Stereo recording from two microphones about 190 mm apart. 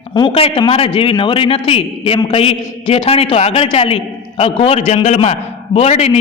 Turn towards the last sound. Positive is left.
turn(degrees=35)  # may be behind; listen again after turning